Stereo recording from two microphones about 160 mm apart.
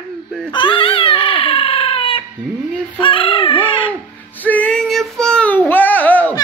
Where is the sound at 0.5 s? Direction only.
30° left (ahead or behind).